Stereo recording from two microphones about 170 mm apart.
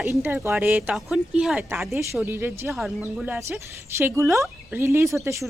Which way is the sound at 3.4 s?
15° right (ahead or behind).